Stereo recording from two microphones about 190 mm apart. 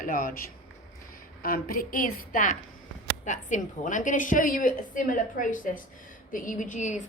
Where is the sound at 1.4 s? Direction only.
50° left (ahead or behind).